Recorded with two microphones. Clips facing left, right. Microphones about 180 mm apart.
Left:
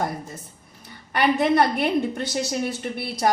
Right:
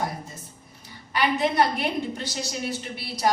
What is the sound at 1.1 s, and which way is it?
A woman's voice, 55° left (ahead or behind).